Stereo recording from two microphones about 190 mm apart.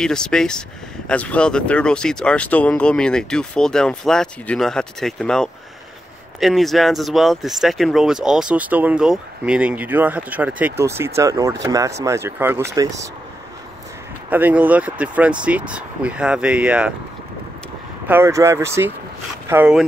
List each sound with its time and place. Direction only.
0.0 s speech: 5° left (ahead or behind); by 13.1 s 20° right (ahead or behind)
14.3 s speech: 10° right (ahead or behind)
18.0 s speech: 10° right (ahead or behind)